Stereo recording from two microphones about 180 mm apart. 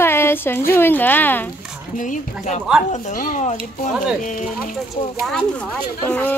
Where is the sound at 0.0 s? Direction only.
15° left (ahead or behind).